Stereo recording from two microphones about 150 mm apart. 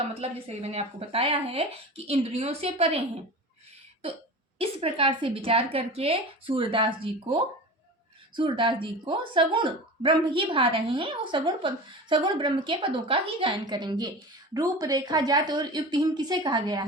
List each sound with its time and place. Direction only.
0.1 s speech: 45° right (ahead or behind)
4.5 s a woman's voice: 40° right (ahead or behind)
8.4 s a woman's voice: 35° right (ahead or behind)